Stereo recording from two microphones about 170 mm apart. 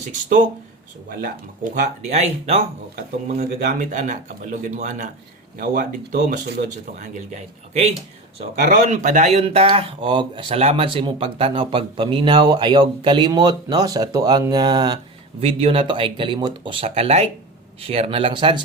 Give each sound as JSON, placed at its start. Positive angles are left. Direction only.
{"t": 0.0, "sound": "speech", "side_deg": -50}
{"t": 1.7, "sound": "speech", "side_deg": -45}
{"t": 2.9, "sound": "speech", "side_deg": -55}
{"t": 8.5, "sound": "speech", "side_deg": -50}
{"t": 15.4, "sound": "speech", "side_deg": -35}